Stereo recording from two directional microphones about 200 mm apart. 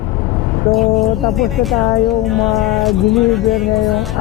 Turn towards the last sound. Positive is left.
turn(degrees=0)  # may be behind; listen again after turning